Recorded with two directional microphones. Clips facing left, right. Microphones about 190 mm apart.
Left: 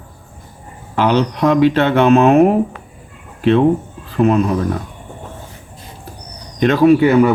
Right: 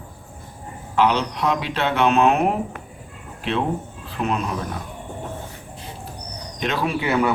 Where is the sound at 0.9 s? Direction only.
45° left (ahead or behind).